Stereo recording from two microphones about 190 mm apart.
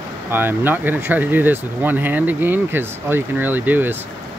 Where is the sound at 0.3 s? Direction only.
10° right (ahead or behind).